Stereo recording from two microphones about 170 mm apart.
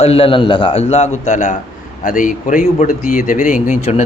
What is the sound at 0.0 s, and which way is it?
A man's voice, 35° left (ahead or behind).